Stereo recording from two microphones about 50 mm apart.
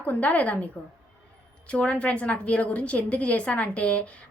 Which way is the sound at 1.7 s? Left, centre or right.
Left.